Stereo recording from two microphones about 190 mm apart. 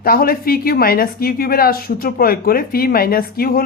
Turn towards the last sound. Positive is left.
turn(degrees=50)  # may be behind; listen again after turning